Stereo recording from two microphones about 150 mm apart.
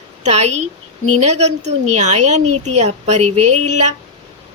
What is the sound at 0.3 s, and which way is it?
A woman's voice, 45° right (ahead or behind).